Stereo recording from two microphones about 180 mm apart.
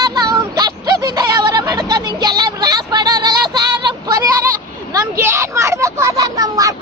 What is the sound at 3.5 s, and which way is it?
Child singing, 25° right (ahead or behind).